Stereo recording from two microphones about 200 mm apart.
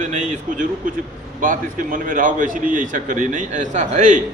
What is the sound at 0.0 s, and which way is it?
A man's voice, 40° right (ahead or behind).